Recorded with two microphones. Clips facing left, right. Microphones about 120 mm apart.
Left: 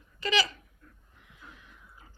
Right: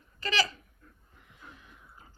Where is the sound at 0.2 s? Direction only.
40° right (ahead or behind).